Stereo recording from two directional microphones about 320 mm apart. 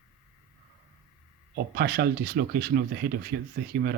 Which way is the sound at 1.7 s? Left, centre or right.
Right.